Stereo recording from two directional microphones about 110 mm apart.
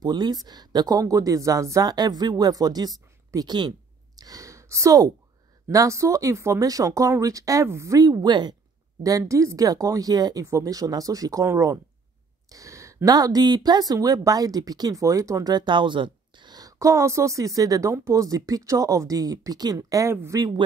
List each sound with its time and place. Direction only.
0.0 s speech: 40° right (ahead or behind)
4.2 s a sound: 30° right (ahead or behind)
5.7 s speech: 30° right (ahead or behind)
9.0 s speech: 30° right (ahead or behind)